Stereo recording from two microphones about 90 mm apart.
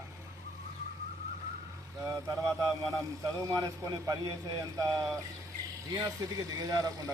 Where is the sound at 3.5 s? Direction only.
35° right (ahead or behind).